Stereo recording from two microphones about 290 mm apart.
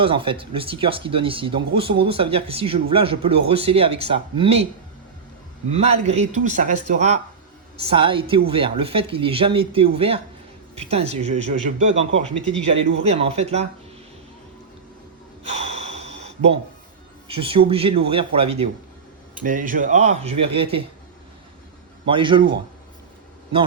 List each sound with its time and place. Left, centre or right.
0.0 s speech: centre
5.7 s a woman's voice: right
15.4 s gasp: right
17.2 s speech: centre
22.0 s a woman's voice: centre